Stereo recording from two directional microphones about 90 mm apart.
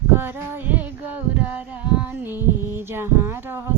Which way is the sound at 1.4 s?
15° right (ahead or behind).